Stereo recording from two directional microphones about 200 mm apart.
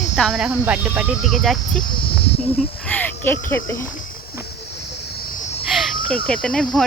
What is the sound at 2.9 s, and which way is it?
Speech, 10° left (ahead or behind).